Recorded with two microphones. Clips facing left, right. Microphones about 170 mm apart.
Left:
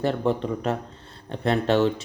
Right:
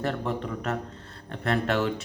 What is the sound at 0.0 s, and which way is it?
Speech, 30° left (ahead or behind).